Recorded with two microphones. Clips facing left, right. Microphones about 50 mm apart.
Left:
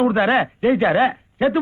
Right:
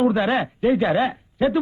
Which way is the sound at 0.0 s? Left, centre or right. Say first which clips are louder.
Left 3 dB; left.